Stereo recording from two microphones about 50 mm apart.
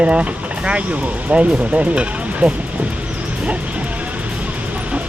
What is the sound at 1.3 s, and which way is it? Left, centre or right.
Speech, right.